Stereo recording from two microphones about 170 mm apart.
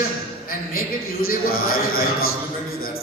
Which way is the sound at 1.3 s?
60° left (ahead or behind).